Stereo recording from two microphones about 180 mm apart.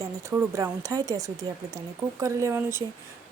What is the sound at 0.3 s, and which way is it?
Speech, 15° right (ahead or behind).